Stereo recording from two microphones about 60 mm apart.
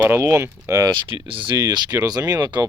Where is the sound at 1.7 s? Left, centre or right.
Right.